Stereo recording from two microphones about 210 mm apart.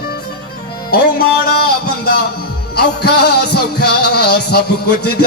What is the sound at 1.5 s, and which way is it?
Music, 45° left (ahead or behind).